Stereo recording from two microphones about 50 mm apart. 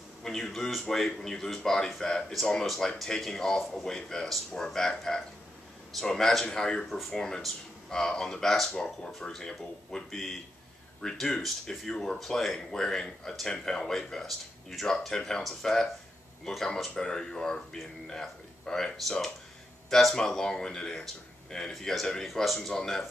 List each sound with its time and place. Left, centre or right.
0.2 s speech: centre
2.6 s speech: centre